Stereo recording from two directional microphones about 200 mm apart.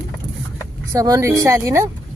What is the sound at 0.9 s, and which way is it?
Speech, 15° right (ahead or behind).